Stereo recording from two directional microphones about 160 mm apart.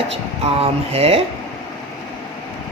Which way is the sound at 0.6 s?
40° right (ahead or behind).